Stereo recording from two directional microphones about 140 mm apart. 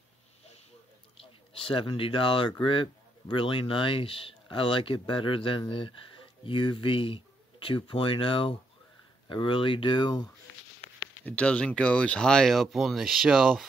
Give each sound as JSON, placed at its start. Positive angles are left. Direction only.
{"t": 1.6, "sound": "speech", "side_deg": 40}
{"t": 11.2, "sound": "speech", "side_deg": 10}